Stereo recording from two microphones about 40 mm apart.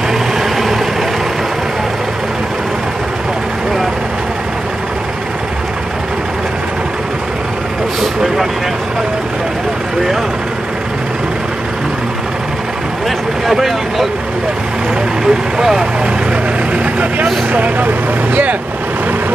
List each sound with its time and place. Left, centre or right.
13.5 s vehicle: centre
15.2 s vehicle: centre
16.7 s vehicle: right